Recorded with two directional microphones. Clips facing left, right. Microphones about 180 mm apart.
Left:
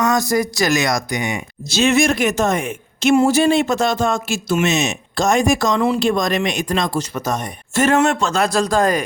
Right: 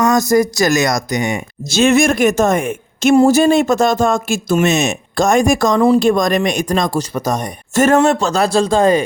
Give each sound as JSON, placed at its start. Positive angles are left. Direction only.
{"t": 0.0, "sound": "speech", "side_deg": -45}